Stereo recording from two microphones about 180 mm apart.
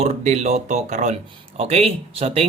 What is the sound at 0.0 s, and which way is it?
Speech, 40° right (ahead or behind).